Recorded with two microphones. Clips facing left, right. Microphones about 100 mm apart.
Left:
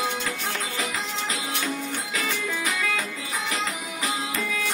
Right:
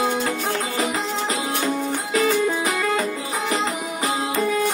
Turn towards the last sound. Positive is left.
turn(degrees=-35)  # may be behind; listen again after turning